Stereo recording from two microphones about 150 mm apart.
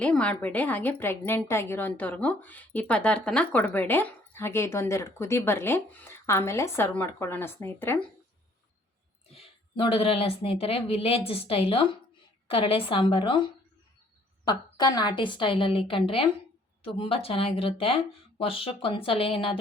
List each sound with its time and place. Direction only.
0.0 s a woman's voice: 5° left (ahead or behind)
9.3 s speech: 35° left (ahead or behind)